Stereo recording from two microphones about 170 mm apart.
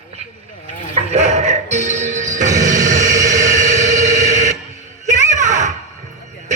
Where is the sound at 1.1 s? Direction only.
40° right (ahead or behind).